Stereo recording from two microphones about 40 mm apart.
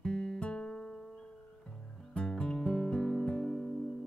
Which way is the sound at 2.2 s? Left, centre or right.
Left.